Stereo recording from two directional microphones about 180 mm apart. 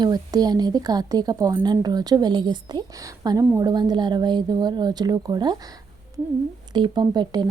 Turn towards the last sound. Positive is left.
turn(degrees=-25)  # may be behind; listen again after turning